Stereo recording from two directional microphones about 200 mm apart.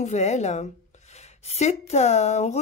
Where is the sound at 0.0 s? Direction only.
35° left (ahead or behind).